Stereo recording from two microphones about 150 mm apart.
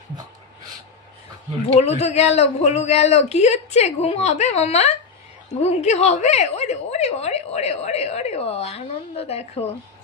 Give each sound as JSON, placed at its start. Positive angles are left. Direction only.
{"t": 1.7, "sound": "a woman's voice", "side_deg": 45}